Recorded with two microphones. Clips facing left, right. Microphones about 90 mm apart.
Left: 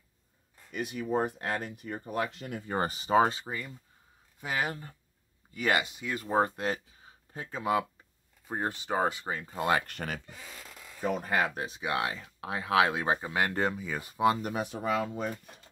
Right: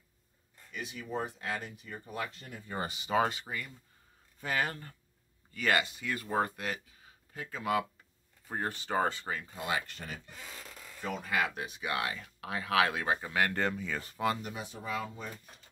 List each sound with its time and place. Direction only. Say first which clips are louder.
0.7 s speech: left 8 dB; 50° left (ahead or behind); by 2.8 s 80° left
2.8 s speech: left 5 dB; 40° left (ahead or behind)
4.4 s speech: left 1 dB; 10° left (ahead or behind)
9.5 s speech: left 9 dB; 50° left (ahead or behind); by 10.2 s 70° left (ahead or behind)
11.1 s speech: left 4 dB; 45° left (ahead or behind); by 14.3 s 15° left (ahead or behind)
14.4 s speech: left 8 dB; 60° left (ahead or behind)